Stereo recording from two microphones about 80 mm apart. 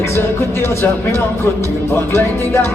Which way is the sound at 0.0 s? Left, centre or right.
Left.